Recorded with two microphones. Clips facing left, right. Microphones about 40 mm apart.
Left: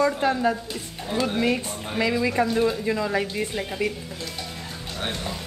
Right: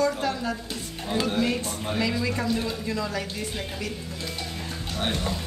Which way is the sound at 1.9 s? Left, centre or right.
Left.